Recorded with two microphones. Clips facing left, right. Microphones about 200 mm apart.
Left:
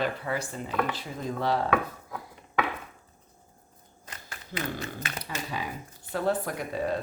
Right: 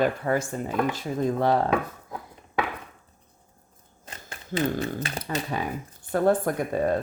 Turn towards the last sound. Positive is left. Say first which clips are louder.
# right 5 dB
turn(degrees=-50)  # may be behind; listen again after turning